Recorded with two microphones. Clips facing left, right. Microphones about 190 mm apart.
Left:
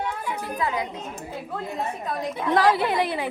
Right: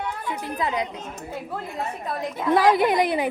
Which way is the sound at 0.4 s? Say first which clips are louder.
Right 1 dB; 20° right (ahead or behind).